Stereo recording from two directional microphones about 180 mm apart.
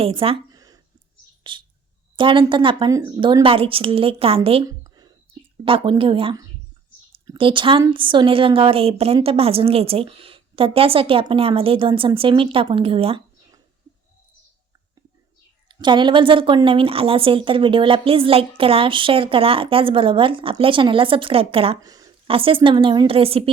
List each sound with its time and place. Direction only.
0.0 s a sound: 30° right (ahead or behind)
1.5 s a woman's voice: 25° right (ahead or behind)
4.7 s a sound: 20° right (ahead or behind)
5.6 s a woman's voice: 30° right (ahead or behind)
15.7 s a woman's voice: 25° right (ahead or behind)
21.8 s a woman's voice: 20° right (ahead or behind)